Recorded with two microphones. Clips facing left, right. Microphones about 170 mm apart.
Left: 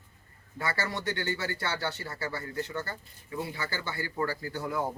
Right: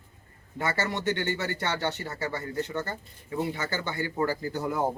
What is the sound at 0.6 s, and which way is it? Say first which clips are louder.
Speech: right 3 dB; 20° right (ahead or behind).